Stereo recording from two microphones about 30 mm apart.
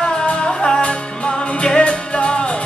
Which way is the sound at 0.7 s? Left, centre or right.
Left.